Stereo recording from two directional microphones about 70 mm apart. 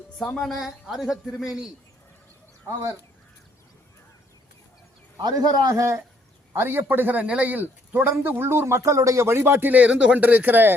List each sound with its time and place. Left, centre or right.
0.3 s a woman's voice: centre
2.6 s speech: right
5.2 s a man's voice: right
6.5 s a man's voice: right
9.2 s speech: right